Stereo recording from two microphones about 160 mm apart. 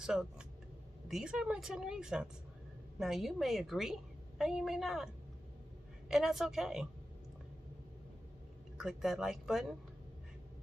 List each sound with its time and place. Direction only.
0.0 s a woman's voice: 5° right (ahead or behind)
8.7 s a woman's voice: 5° right (ahead or behind)